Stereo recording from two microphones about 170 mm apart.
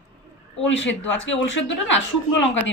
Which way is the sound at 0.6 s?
90° left.